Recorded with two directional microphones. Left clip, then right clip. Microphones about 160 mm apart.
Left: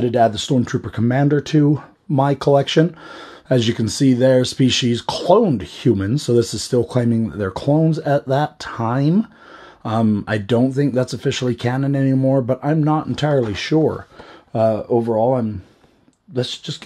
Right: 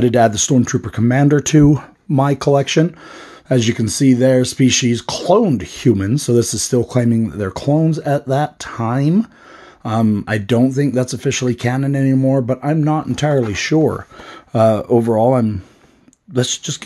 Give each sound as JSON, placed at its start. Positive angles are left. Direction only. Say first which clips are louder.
{"t": 0.0, "sound": "speech", "louder": "right 3 dB", "side_deg": -35}
{"t": 1.4, "sound": "speech", "louder": "right 4 dB", "side_deg": -35}
{"t": 2.1, "sound": "speech", "louder": "right 1 dB", "side_deg": -15}
{"t": 14.5, "sound": "speech", "louder": "right 4 dB", "side_deg": -35}